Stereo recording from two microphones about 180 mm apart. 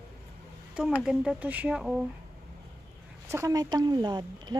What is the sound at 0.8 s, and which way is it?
Speech, 5° right (ahead or behind).